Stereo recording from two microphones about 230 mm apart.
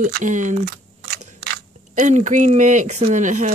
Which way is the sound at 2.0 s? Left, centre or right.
Right.